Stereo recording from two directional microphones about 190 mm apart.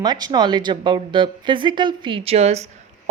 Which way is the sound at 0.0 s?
20° right (ahead or behind).